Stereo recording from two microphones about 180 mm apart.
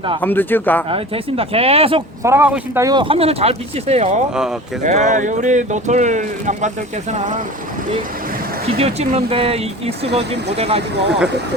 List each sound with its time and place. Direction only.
0.2 s speech: 10° left (ahead or behind)
0.9 s speech: 30° right (ahead or behind)
2.2 s speech: 10° right (ahead or behind)
3.0 s speech: 30° right (ahead or behind)
8.6 s speech: 35° right (ahead or behind)